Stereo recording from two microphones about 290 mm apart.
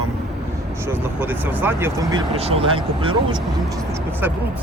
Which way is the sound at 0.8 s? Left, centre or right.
Centre.